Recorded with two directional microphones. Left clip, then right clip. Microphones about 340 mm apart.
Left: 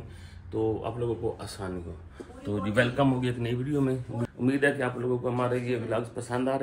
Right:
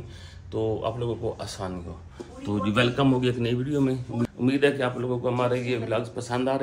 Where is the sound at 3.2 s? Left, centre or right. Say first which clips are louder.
Right 5 dB; centre.